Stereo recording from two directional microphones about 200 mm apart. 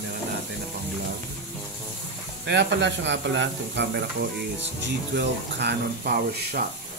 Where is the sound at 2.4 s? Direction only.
60° right (ahead or behind).